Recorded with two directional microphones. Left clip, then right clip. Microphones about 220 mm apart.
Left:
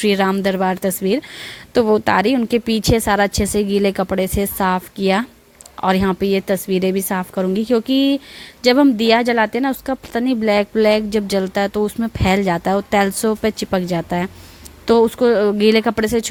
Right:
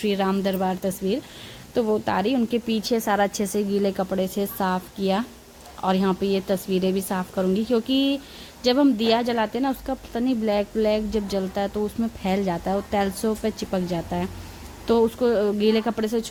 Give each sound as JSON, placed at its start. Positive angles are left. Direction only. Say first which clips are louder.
{"t": 0.0, "sound": "speech", "louder": "left 7 dB", "side_deg": 35}